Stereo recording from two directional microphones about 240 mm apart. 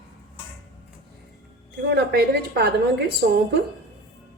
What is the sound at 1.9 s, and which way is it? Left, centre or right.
Speech, right.